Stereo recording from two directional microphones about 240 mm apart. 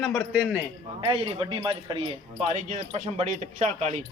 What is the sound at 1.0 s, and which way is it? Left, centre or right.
A man's voice, right.